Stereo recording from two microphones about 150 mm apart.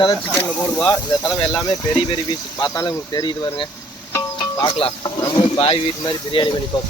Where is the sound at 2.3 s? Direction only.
25° left (ahead or behind).